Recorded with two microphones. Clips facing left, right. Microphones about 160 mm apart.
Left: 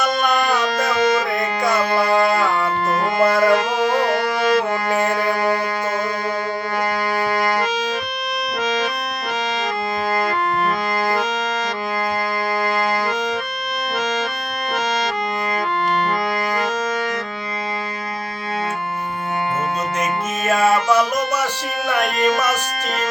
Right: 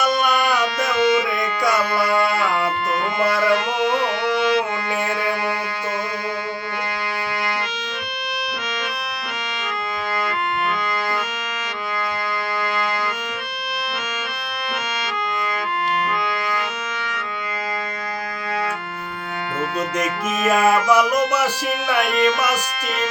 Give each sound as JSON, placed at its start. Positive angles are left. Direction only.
{"t": 0.6, "sound": "music", "side_deg": 40}
{"t": 8.6, "sound": "music", "side_deg": 40}
{"t": 16.2, "sound": "accordion", "side_deg": 40}
{"t": 20.5, "sound": "music", "side_deg": -10}
{"t": 22.0, "sound": "a sound", "side_deg": 45}